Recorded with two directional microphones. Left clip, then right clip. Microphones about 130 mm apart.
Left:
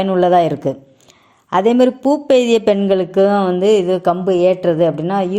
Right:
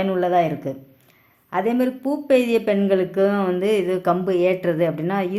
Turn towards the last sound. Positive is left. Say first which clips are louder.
# left 6 dB
turn(degrees=25)  # may be behind; listen again after turning